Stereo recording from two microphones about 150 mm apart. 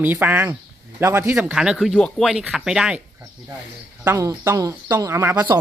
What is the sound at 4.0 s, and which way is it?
Speech, 20° right (ahead or behind).